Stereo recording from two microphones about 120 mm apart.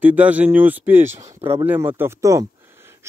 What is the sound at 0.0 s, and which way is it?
Speech, 15° right (ahead or behind).